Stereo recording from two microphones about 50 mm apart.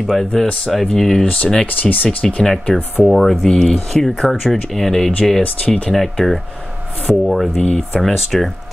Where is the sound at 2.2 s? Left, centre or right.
Centre.